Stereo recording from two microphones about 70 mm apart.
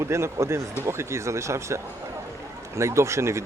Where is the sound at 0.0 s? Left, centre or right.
Right.